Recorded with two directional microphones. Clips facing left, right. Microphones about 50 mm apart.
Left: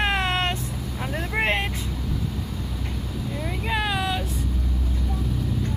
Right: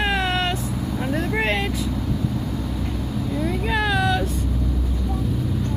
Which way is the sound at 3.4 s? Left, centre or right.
Centre.